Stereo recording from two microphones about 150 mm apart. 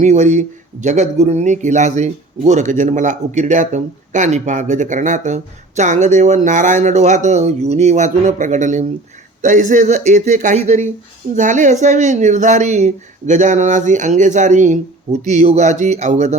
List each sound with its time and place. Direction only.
0.0 s speech: 55° right (ahead or behind)
10.6 s speech: 50° right (ahead or behind)